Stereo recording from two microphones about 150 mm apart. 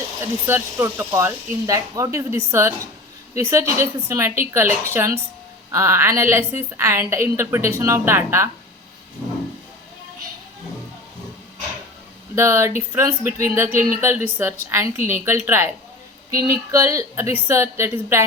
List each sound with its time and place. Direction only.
0.2 s speech: 15° right (ahead or behind)
12.4 s speech: 20° right (ahead or behind)
16.7 s a woman's voice: 20° right (ahead or behind)